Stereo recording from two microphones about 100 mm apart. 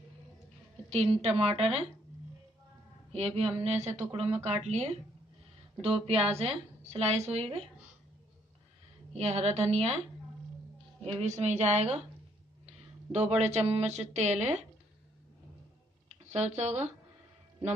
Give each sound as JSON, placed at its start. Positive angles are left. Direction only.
{"t": 0.8, "sound": "a woman's voice", "side_deg": -90}
{"t": 3.1, "sound": "a woman's voice", "side_deg": -90}
{"t": 9.1, "sound": "speech", "side_deg": -90}
{"t": 11.1, "sound": "speech", "side_deg": -90}
{"t": 12.6, "sound": "a sound", "side_deg": -90}
{"t": 13.4, "sound": "speech", "side_deg": -90}
{"t": 16.3, "sound": "speech", "side_deg": -90}